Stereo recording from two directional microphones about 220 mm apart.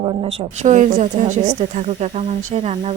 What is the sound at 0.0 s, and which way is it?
Speech, 20° right (ahead or behind).